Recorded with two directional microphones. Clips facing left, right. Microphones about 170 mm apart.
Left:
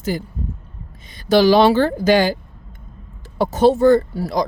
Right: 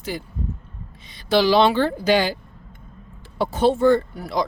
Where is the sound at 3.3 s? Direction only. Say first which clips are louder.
Left 4 dB; 40° left (ahead or behind).